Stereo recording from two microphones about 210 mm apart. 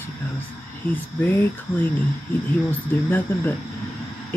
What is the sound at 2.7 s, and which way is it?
Speech, 10° left (ahead or behind).